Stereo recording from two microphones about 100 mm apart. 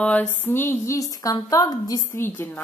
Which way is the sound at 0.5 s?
25° left (ahead or behind).